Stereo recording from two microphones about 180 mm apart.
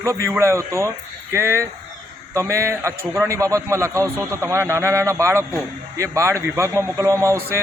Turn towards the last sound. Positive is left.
turn(degrees=-15)  # may be behind; listen again after turning